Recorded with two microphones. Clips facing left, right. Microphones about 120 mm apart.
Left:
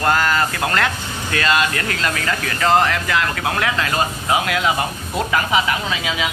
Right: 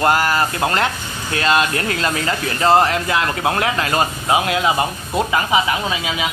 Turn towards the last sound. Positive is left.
turn(degrees=-20)  # may be behind; listen again after turning